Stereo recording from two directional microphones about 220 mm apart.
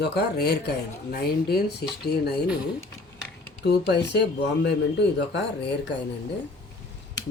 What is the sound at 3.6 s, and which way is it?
Speech, 50° left (ahead or behind).